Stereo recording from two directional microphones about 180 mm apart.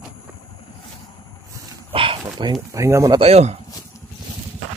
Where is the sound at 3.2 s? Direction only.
35° right (ahead or behind).